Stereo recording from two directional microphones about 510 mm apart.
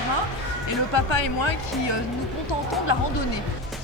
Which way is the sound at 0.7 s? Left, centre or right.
Left.